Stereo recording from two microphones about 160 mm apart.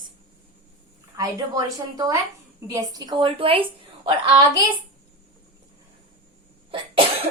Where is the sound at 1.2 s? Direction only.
20° right (ahead or behind).